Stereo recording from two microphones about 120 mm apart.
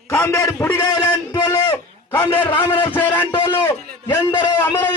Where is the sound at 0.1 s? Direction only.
25° left (ahead or behind).